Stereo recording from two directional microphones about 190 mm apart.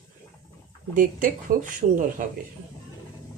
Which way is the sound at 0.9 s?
45° right (ahead or behind).